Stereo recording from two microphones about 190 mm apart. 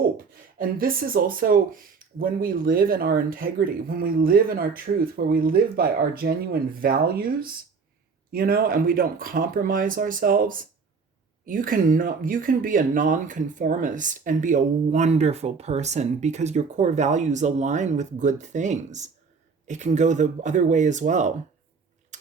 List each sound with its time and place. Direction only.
0.6 s speech: 50° right (ahead or behind)
22.1 s tick-tock: 40° right (ahead or behind)